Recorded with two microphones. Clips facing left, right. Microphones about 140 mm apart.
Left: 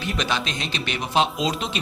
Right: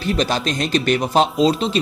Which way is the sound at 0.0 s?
35° right (ahead or behind).